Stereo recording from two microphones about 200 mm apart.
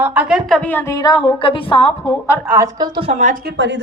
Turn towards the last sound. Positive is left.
turn(degrees=-60)  # may be behind; listen again after turning